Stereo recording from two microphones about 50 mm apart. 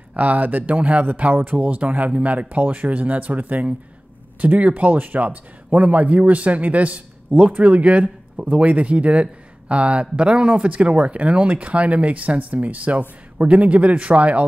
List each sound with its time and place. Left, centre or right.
0.1 s speech: right